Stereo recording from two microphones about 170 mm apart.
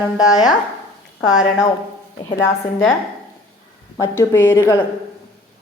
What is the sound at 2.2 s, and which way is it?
Speech, 15° left (ahead or behind).